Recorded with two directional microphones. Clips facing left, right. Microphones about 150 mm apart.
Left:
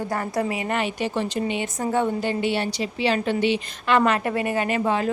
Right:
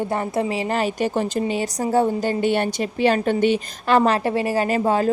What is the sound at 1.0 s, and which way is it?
A woman's voice, 45° right (ahead or behind).